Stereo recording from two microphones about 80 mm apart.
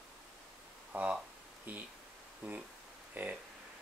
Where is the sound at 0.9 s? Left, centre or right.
Centre.